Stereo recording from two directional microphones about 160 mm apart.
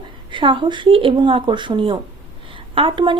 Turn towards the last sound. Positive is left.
turn(degrees=-30)  # may be behind; listen again after turning